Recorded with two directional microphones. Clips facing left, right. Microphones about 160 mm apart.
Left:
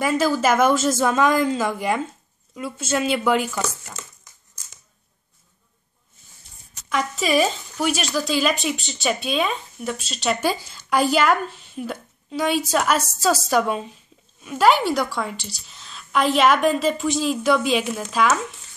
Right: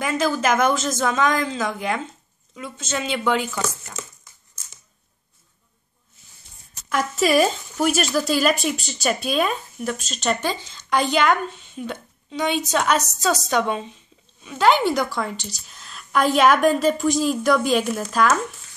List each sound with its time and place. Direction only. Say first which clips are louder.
0.0 s speech: left 2 dB; 5° left (ahead or behind)
6.9 s speech: right 2 dB; centre (ahead or behind)